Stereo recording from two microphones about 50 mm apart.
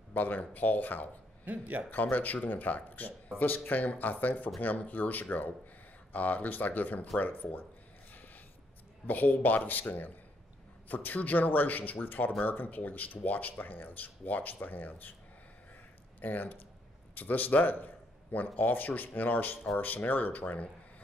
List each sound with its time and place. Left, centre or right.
0.1 s speech: left
1.4 s a man's voice: right
1.9 s speech: left
9.0 s speech: left
16.2 s speech: left